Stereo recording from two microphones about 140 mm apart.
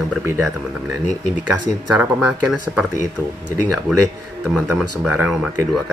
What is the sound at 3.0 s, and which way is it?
Speech, 65° left (ahead or behind).